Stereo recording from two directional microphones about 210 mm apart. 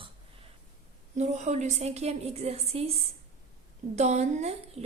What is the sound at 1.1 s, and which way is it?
A woman's voice, 35° right (ahead or behind).